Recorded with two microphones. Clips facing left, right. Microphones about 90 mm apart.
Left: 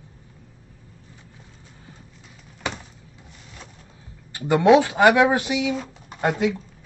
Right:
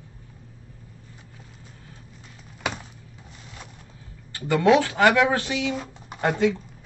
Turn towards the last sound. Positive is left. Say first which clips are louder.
# even
turn(degrees=10)  # may be behind; listen again after turning